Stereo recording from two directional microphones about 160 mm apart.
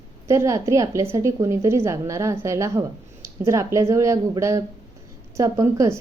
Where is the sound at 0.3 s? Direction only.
20° right (ahead or behind).